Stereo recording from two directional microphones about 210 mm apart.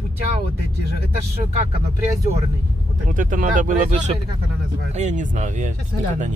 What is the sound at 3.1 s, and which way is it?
Speech, 40° right (ahead or behind).